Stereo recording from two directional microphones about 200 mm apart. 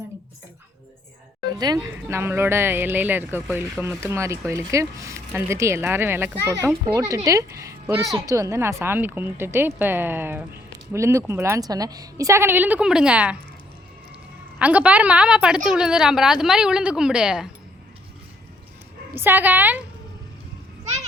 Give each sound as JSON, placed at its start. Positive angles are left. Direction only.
{"t": 1.5, "sound": "speech", "side_deg": -20}
{"t": 14.6, "sound": "a woman's voice", "side_deg": -5}
{"t": 19.1, "sound": "speech", "side_deg": -10}